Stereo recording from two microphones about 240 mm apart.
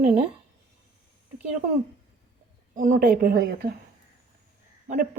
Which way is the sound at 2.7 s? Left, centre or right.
Right.